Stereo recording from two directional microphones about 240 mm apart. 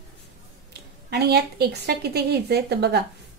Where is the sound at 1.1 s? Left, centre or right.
Right.